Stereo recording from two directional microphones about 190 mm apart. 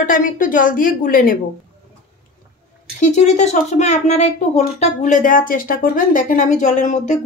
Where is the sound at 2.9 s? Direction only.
40° left (ahead or behind).